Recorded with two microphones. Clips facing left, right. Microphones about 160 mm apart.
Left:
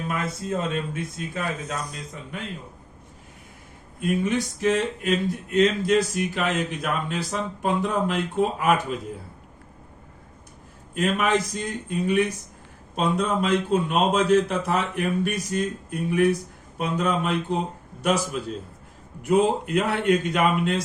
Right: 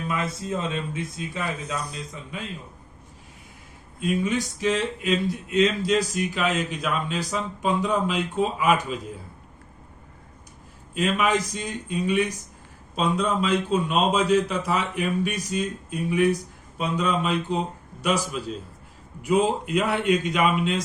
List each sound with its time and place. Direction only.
0.7 s speech: 55° left (ahead or behind)
4.0 s speech: 55° left (ahead or behind)
10.9 s a man's voice: 50° left (ahead or behind)